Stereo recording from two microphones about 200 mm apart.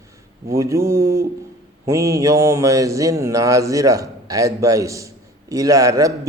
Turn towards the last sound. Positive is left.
turn(degrees=-15)  # may be behind; listen again after turning